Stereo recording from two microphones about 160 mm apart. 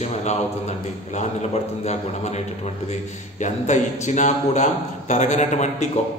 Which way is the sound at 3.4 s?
45° left (ahead or behind).